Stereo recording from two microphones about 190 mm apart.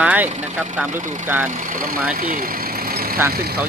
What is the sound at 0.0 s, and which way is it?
Vehicle, 10° right (ahead or behind).